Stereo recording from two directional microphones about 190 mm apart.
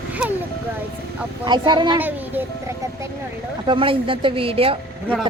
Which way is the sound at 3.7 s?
25° right (ahead or behind).